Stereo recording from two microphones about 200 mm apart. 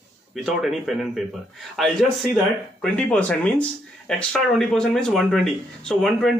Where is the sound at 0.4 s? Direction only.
Centre (ahead or behind).